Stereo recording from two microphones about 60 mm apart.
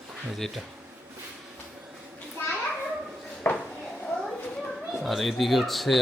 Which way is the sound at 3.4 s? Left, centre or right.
Left.